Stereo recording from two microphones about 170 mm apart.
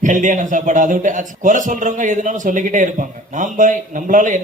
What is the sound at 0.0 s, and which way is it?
A man's voice, 50° right (ahead or behind).